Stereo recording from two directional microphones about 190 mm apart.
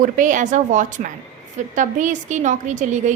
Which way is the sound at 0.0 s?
40° right (ahead or behind).